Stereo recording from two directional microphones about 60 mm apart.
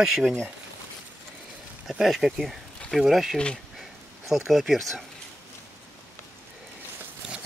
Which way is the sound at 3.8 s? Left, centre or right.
Centre.